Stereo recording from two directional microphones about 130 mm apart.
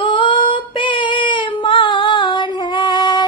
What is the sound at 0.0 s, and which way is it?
Female singing, 40° left (ahead or behind).